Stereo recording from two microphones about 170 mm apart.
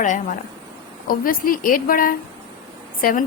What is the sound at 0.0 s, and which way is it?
A woman's voice, 50° left (ahead or behind).